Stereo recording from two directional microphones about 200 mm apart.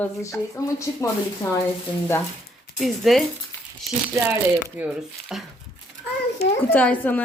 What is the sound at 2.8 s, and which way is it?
Speech, centre (ahead or behind).